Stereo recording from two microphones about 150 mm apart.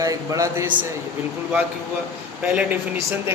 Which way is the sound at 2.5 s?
10° right (ahead or behind).